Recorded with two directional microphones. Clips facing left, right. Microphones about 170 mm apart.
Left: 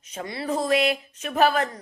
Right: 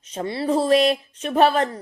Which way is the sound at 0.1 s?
30° right (ahead or behind).